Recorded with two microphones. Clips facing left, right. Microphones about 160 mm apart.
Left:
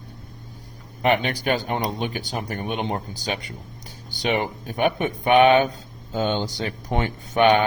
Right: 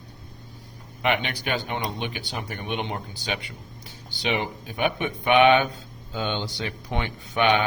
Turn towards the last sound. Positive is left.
turn(degrees=45)  # may be behind; listen again after turning